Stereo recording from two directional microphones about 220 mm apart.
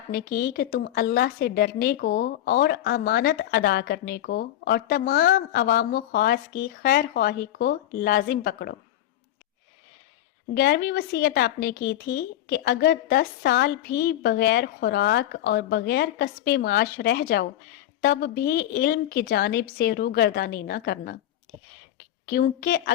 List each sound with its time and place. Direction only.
0.1 s a woman's voice: 45° left (ahead or behind)
10.5 s a woman's voice: 45° left (ahead or behind)
22.3 s a woman's voice: 45° left (ahead or behind)